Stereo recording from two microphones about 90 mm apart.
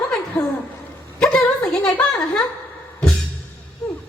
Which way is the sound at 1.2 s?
15° left (ahead or behind).